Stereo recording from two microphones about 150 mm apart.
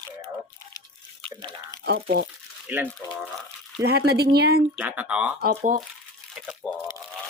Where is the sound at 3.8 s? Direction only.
90° right.